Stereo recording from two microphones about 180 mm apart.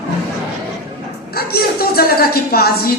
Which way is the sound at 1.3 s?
60° left (ahead or behind).